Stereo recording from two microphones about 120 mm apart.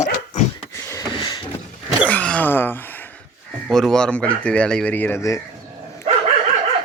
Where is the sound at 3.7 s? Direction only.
5° left (ahead or behind).